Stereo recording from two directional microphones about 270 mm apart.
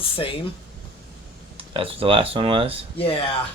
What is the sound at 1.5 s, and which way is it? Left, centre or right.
Speech, right.